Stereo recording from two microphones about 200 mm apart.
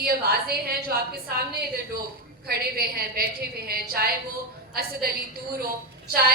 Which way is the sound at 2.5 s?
50° right (ahead or behind).